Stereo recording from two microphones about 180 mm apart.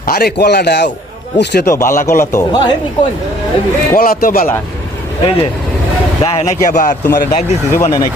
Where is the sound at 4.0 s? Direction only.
55° left (ahead or behind).